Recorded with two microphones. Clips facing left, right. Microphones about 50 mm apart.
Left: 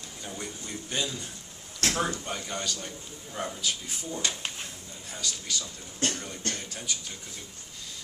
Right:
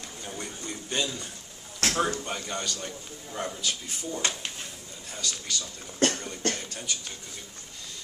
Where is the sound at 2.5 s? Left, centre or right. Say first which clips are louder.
Right 1 dB; centre.